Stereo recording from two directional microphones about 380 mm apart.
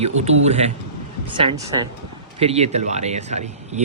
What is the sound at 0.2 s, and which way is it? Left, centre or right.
Speech, centre.